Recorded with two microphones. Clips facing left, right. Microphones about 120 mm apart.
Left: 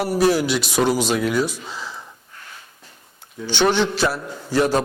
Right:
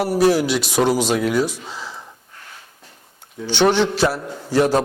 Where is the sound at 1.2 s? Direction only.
40° right (ahead or behind).